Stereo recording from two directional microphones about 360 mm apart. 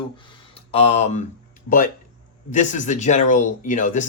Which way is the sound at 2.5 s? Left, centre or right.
Centre.